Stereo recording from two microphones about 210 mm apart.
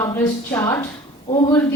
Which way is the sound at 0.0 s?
15° left (ahead or behind).